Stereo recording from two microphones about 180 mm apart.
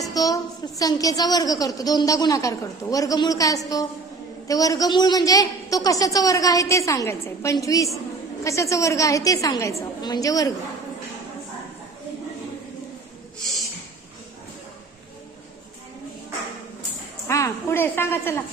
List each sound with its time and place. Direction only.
0.0 s a sound: 20° left (ahead or behind)
0.8 s a woman's voice: 20° left (ahead or behind)
17.2 s a woman's voice: 15° left (ahead or behind)